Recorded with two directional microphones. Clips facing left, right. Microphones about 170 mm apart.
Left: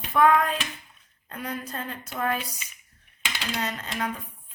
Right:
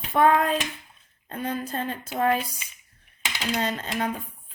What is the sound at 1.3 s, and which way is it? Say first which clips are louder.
Speech: right 4 dB; 30° right (ahead or behind).